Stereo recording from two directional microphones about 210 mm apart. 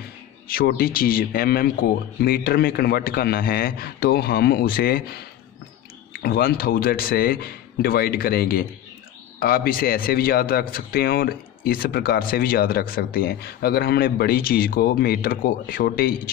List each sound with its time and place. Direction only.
0.5 s speech: 45° left (ahead or behind)
6.2 s speech: 45° left (ahead or behind)